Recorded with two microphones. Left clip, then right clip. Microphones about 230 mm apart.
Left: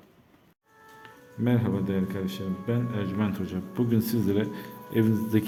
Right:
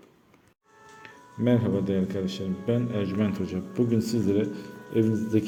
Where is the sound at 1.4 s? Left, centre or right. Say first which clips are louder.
Right 3 dB; centre.